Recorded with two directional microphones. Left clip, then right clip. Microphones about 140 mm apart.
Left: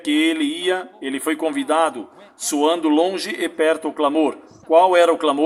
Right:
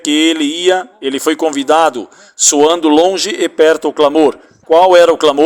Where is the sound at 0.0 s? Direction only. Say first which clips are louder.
Right 7 dB; 35° right (ahead or behind).